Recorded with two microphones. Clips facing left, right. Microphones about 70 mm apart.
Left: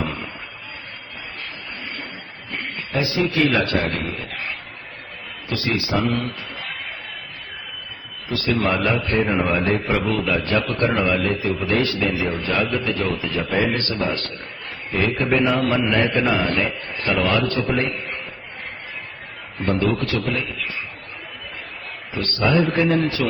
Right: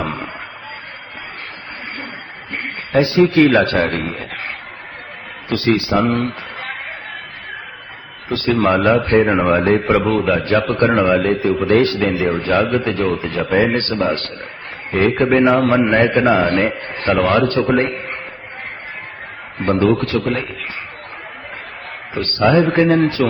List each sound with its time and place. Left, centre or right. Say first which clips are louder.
0.0 s a sound: right 4 dB; right
2.5 s speech: right 6 dB; right
5.5 s a sound: right 7 dB; right
8.3 s a man's voice: right 6 dB; right
19.5 s a man's voice: right 6 dB; right
22.1 s a man's voice: right 6 dB; right